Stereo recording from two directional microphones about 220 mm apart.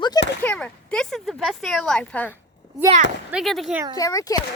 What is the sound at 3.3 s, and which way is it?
Speech, centre (ahead or behind).